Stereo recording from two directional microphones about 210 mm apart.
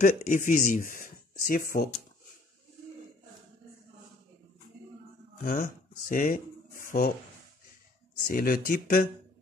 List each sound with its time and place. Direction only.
0.0 s speech: 40° left (ahead or behind)
5.4 s speech: 40° left (ahead or behind)
8.3 s speech: 45° left (ahead or behind)